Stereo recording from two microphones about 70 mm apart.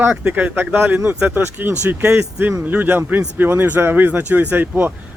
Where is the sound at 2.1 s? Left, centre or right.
Right.